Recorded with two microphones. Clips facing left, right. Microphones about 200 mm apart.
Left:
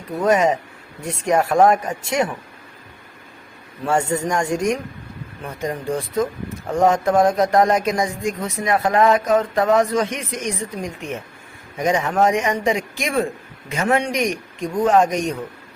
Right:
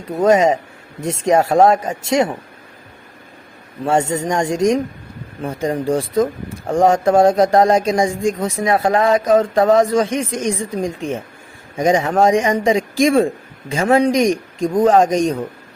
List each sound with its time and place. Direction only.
0.3 s speech: 25° right (ahead or behind)
3.8 s speech: 25° right (ahead or behind)